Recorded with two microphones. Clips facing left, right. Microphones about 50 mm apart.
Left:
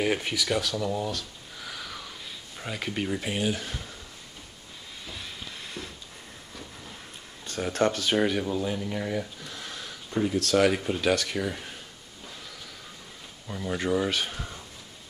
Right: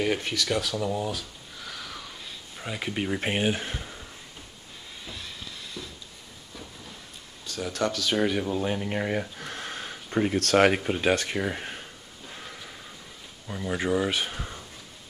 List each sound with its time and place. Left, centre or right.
0.0 s speech: centre
1.7 s a sound: centre
3.2 s speech: right
5.8 s a sound: left
7.4 s speech: left
8.2 s speech: centre
8.6 s speech: right
9.4 s a sound: right
11.0 s speech: right
13.5 s speech: centre